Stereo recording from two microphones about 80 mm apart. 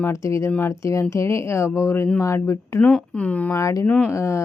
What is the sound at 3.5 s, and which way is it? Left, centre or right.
Speech, left.